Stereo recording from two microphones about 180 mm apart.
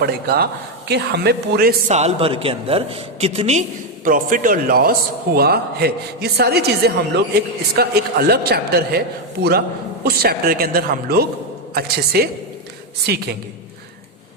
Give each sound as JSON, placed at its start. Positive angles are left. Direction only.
{"t": 0.0, "sound": "a man's voice", "side_deg": -60}
{"t": 1.9, "sound": "a woman's voice", "side_deg": -35}
{"t": 4.0, "sound": "a man's voice", "side_deg": -50}